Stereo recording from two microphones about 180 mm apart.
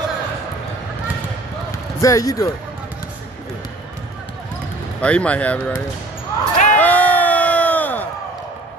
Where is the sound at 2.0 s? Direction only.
20° left (ahead or behind).